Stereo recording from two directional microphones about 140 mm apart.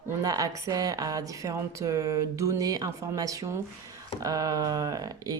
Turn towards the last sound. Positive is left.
turn(degrees=-25)  # may be behind; listen again after turning